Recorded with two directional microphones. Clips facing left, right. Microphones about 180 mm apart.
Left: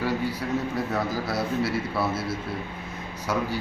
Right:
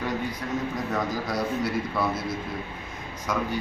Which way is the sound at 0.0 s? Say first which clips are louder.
Left 3 dB; 10° left (ahead or behind).